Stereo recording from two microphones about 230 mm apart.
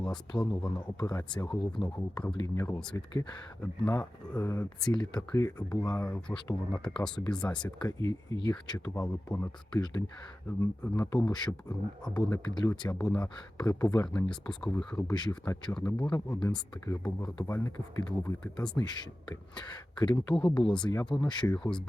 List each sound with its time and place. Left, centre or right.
0.0 s speech: centre
0.6 s speech: centre
1.3 s speech: centre
4.9 s speech: centre
12.0 s speech: centre
12.5 s speech: centre
15.1 s speech: centre
15.7 s speech: centre
18.8 s speech: centre
20.7 s speech: centre
21.2 s speech: centre